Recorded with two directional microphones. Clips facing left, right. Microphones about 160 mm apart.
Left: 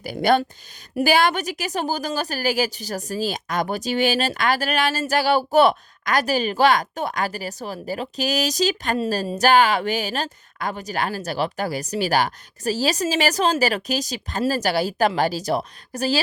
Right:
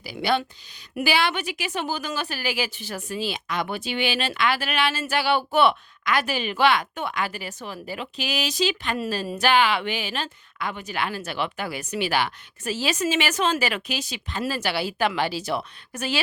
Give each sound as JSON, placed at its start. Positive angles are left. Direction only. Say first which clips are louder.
{"t": 0.0, "sound": "a woman's voice", "louder": "left 5 dB", "side_deg": 50}